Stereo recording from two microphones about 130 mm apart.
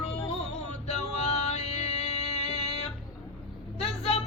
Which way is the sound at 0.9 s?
55° left (ahead or behind).